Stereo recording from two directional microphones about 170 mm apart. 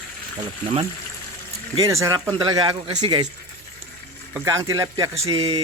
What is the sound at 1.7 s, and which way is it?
Speech, 20° right (ahead or behind).